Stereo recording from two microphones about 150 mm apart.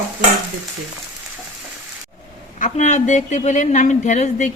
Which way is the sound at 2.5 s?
55° left (ahead or behind).